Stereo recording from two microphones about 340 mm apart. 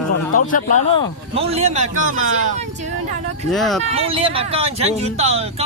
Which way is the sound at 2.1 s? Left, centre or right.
Right.